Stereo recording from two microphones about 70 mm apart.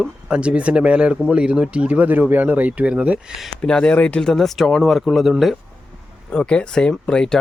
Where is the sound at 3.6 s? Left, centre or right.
Centre.